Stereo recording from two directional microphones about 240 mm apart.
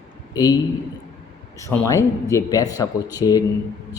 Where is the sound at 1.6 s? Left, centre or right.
Centre.